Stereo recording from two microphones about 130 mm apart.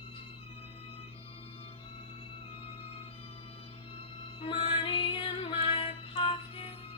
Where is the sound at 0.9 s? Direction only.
45° left (ahead or behind).